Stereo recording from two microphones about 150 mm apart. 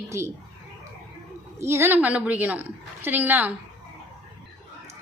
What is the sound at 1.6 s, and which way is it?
Speech, 15° right (ahead or behind).